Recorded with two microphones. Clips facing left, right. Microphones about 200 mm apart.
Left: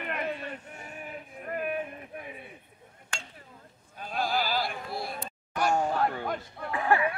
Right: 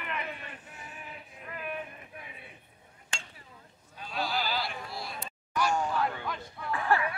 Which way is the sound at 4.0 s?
50° left (ahead or behind).